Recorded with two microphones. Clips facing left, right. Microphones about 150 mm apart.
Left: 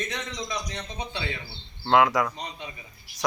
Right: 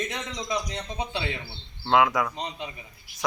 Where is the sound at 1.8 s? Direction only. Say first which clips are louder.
Left 1 dB; centre (ahead or behind).